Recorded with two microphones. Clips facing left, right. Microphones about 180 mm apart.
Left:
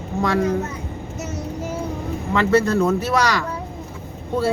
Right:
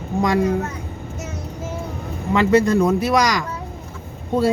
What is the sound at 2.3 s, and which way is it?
Speech, 15° right (ahead or behind).